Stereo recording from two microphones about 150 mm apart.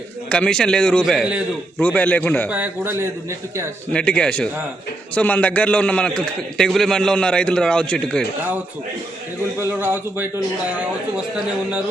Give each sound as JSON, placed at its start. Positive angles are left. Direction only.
{"t": 0.3, "sound": "a man's voice", "side_deg": 5}
{"t": 1.0, "sound": "a man's voice", "side_deg": -5}
{"t": 1.8, "sound": "a man's voice", "side_deg": 10}
{"t": 2.5, "sound": "speech", "side_deg": -10}
{"t": 3.9, "sound": "a man's voice", "side_deg": 5}
{"t": 9.6, "sound": "speech", "side_deg": -15}